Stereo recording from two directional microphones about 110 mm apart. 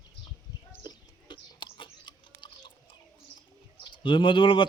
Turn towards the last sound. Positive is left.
turn(degrees=50)  # may be behind; listen again after turning